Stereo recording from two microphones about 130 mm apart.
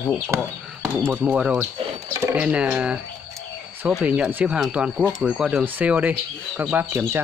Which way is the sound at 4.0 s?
10° right (ahead or behind).